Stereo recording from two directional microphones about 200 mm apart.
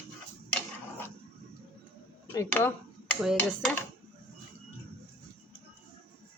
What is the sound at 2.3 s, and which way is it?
Speech, 10° left (ahead or behind).